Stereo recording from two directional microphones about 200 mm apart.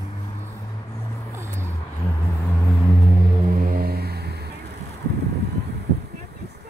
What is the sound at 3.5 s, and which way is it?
Music, 50° right (ahead or behind).